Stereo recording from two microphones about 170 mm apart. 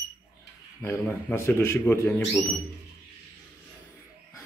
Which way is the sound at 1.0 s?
10° left (ahead or behind).